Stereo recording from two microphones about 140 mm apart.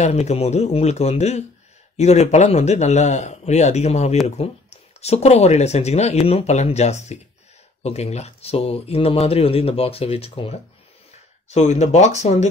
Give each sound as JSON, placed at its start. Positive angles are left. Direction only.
{"t": 0.0, "sound": "speech", "side_deg": 50}
{"t": 11.4, "sound": "speech", "side_deg": 55}